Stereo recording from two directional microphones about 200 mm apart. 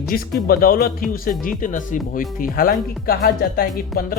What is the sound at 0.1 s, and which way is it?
Speech, 45° left (ahead or behind).